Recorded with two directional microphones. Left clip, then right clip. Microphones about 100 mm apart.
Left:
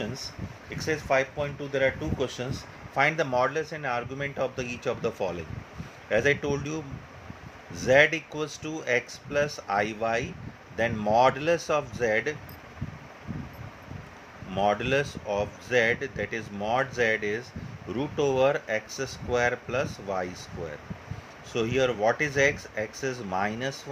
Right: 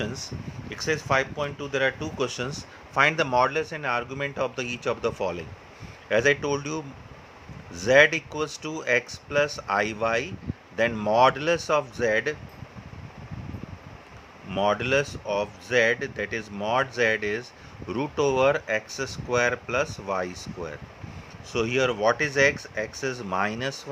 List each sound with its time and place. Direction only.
0.0 s speech: 40° right (ahead or behind); by 12.4 s 20° right (ahead or behind)
14.5 s speech: 20° right (ahead or behind)